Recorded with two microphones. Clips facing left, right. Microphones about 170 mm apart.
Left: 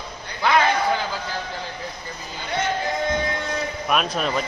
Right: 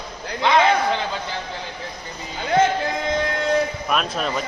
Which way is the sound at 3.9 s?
5° left (ahead or behind).